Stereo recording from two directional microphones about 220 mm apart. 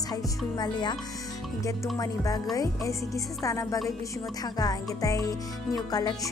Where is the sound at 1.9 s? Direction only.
15° left (ahead or behind).